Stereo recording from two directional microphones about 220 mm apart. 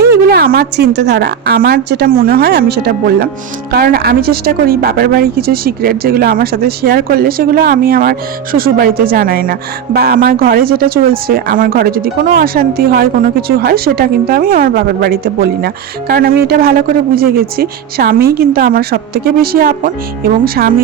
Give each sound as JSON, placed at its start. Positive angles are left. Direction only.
{"t": 0.3, "sound": "a woman's voice", "side_deg": -45}